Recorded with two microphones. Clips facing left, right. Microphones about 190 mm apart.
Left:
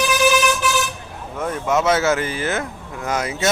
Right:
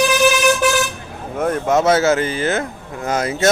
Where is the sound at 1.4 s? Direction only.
55° right (ahead or behind).